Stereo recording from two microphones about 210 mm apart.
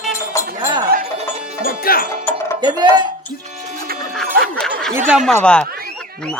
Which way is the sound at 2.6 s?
20° right (ahead or behind).